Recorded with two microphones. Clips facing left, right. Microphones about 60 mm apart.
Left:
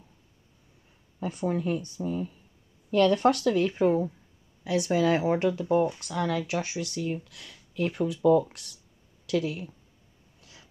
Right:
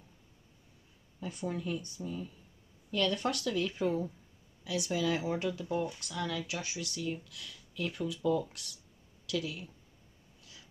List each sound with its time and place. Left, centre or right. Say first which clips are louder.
1.2 s speech: left 8 dB; left